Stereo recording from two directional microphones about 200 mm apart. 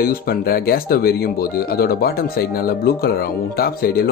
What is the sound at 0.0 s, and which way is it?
A man's voice, 45° left (ahead or behind).